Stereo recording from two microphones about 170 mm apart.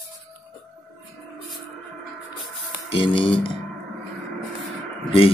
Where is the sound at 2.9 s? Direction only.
30° left (ahead or behind).